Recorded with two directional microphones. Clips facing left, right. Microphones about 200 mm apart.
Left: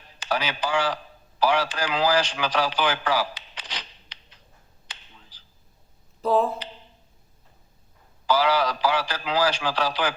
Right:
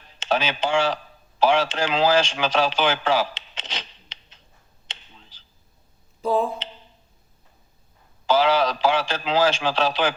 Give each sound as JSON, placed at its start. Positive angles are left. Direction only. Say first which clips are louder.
{"t": 0.2, "sound": "a man's voice", "louder": "right 4 dB", "side_deg": -25}
{"t": 4.9, "sound": "a sound", "louder": "right 2 dB", "side_deg": -25}
{"t": 6.2, "sound": "speech", "louder": "even", "side_deg": 0}
{"t": 8.3, "sound": "a man's voice", "louder": "right 3 dB", "side_deg": -25}